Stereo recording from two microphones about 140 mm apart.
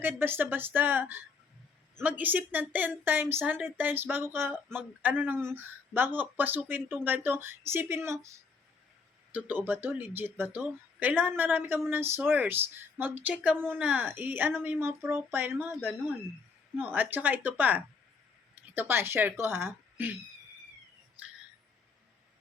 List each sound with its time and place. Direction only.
0.0 s speech: 15° right (ahead or behind)
9.3 s speech: 15° right (ahead or behind)
16.7 s speech: 15° right (ahead or behind)